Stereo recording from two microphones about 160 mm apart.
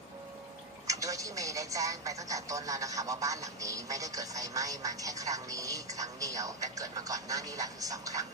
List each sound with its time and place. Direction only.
0.9 s speech: 20° right (ahead or behind)